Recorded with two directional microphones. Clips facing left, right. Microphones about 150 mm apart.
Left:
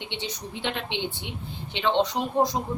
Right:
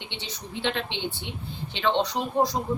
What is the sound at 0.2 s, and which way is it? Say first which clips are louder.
Speech: right 3 dB; 15° left (ahead or behind).